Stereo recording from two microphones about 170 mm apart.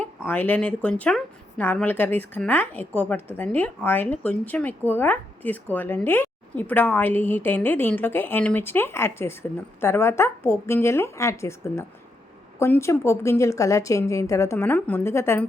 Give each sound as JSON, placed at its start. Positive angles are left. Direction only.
{"t": 0.0, "sound": "a woman's voice", "side_deg": 10}